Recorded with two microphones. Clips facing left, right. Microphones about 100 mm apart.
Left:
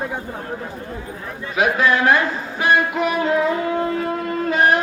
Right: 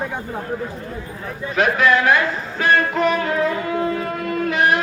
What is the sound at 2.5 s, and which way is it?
Music, 15° left (ahead or behind).